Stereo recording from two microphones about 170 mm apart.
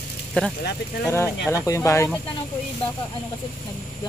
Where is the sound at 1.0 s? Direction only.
20° left (ahead or behind).